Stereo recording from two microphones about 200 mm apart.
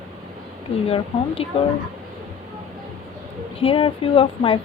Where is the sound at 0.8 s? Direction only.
25° left (ahead or behind).